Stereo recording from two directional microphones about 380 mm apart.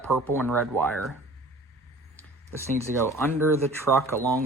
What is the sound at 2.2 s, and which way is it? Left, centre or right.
Speech, centre.